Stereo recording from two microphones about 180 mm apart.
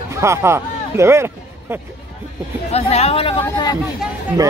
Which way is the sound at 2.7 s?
35° left (ahead or behind).